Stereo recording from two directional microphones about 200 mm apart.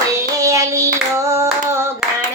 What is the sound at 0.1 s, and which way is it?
Hands, 15° right (ahead or behind).